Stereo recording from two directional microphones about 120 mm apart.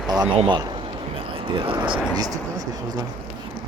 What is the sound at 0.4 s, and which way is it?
Speech, 40° right (ahead or behind).